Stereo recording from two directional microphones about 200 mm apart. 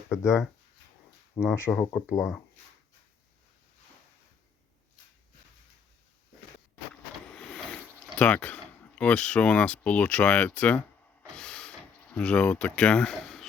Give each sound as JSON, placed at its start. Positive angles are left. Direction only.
{"t": 0.2, "sound": "speech", "side_deg": 15}
{"t": 1.5, "sound": "speech", "side_deg": 10}
{"t": 2.1, "sound": "speech", "side_deg": 0}
{"t": 7.3, "sound": "speech", "side_deg": 5}
{"t": 11.3, "sound": "mechanisms", "side_deg": 5}
{"t": 12.1, "sound": "speech", "side_deg": 5}